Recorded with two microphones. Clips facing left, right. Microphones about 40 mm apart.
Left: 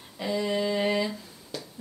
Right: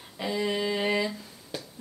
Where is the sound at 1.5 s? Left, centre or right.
Centre.